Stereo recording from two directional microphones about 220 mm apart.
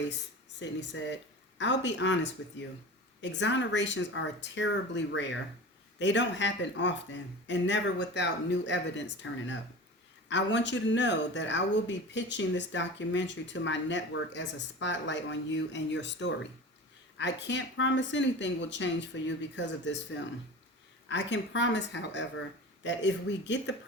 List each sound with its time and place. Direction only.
0.6 s speech: 55° left (ahead or behind)
21.1 s speech: 55° left (ahead or behind)